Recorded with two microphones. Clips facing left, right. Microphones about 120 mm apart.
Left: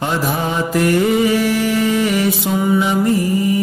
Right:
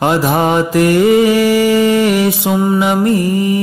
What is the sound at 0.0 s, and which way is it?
Mantra, 75° right (ahead or behind).